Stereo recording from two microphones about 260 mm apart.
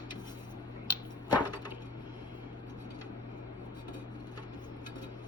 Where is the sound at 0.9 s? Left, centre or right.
Centre.